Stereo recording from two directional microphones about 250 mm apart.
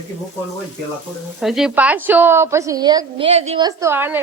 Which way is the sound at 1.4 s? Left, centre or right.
Centre.